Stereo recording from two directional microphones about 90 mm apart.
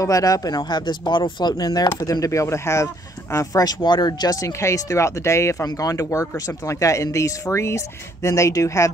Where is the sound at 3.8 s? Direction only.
55° left (ahead or behind).